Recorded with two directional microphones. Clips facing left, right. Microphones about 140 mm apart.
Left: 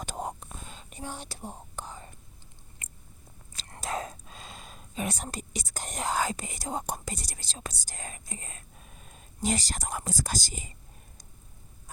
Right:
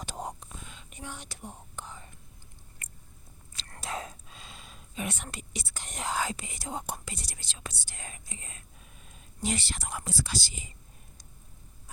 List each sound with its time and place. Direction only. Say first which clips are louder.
0.0 s whispering: left 3 dB; 50° left (ahead or behind)
0.6 s whispering: left 4 dB; 35° left (ahead or behind)
2.8 s chewing: even; 20° left (ahead or behind)
3.8 s speech: left 3 dB; 45° left (ahead or behind)